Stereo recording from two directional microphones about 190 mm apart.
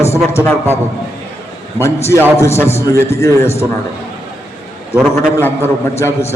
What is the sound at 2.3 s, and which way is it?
A man's voice, 15° left (ahead or behind).